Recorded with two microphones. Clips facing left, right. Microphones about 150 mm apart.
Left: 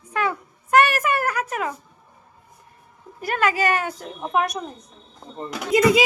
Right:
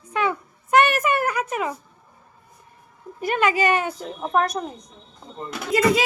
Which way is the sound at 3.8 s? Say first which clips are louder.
Right 2 dB; centre (ahead or behind).